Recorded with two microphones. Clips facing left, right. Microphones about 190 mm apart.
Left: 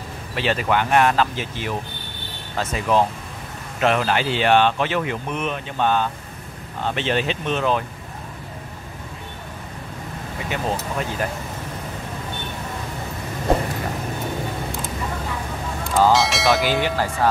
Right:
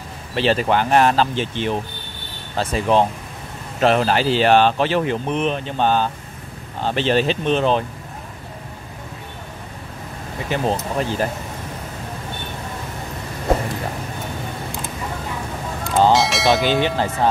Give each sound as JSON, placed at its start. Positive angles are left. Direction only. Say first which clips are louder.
{"t": 0.4, "sound": "speech", "louder": "right 3 dB", "side_deg": -30}
{"t": 10.5, "sound": "speech", "louder": "right 4 dB", "side_deg": -35}
{"t": 16.1, "sound": "speech", "louder": "right 2 dB", "side_deg": 0}
{"t": 16.8, "sound": "speech", "louder": "right 2 dB", "side_deg": -20}